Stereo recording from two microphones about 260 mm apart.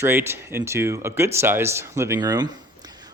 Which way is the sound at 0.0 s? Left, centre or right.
Centre.